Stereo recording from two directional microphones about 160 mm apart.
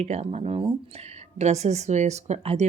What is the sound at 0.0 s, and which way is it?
Speech, 40° right (ahead or behind).